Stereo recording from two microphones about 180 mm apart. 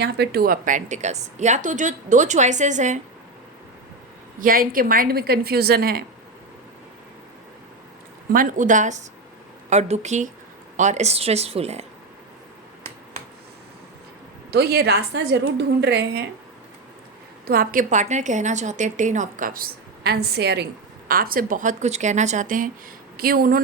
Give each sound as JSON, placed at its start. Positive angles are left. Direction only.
{"t": 0.0, "sound": "a woman's voice", "side_deg": -65}
{"t": 4.4, "sound": "a woman's voice", "side_deg": -50}
{"t": 8.3, "sound": "a woman's voice", "side_deg": -50}
{"t": 14.5, "sound": "a woman's voice", "side_deg": -65}
{"t": 17.4, "sound": "a woman's voice", "side_deg": -55}
{"t": 21.1, "sound": "a woman's voice", "side_deg": -55}